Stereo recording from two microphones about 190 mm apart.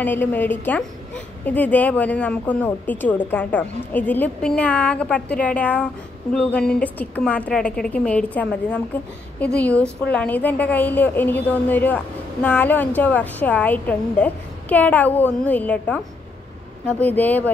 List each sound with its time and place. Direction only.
0.0 s a woman's voice: 10° left (ahead or behind)